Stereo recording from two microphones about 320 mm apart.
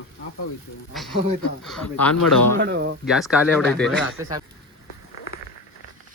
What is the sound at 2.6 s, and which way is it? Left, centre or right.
Speech, right.